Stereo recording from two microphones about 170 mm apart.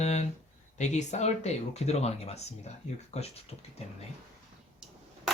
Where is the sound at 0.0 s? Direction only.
40° left (ahead or behind).